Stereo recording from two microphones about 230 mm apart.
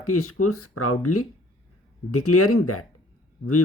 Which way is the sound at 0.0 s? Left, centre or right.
Left.